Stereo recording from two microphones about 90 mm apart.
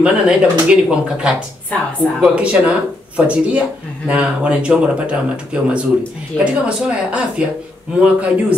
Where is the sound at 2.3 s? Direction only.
15° right (ahead or behind).